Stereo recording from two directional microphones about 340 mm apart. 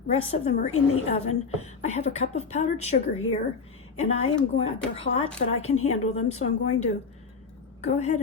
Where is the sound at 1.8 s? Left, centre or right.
Centre.